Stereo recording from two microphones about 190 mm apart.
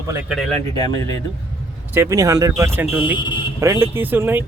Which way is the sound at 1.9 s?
15° right (ahead or behind).